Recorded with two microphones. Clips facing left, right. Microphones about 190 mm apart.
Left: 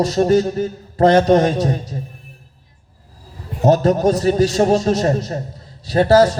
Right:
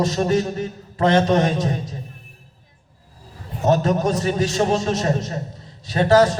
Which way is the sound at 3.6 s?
40° left (ahead or behind).